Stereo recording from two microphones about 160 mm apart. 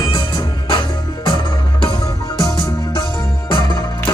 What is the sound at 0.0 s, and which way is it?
Music, 25° left (ahead or behind).